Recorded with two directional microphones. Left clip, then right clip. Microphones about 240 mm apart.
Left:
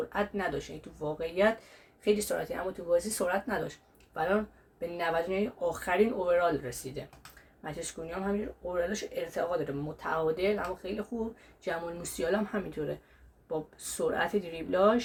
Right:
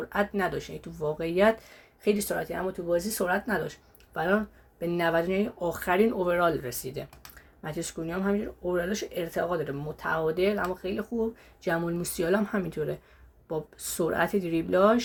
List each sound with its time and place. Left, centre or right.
0.1 s speech: right